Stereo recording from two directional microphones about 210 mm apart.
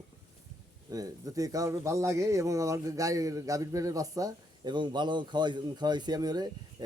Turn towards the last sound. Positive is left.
turn(degrees=-20)  # may be behind; listen again after turning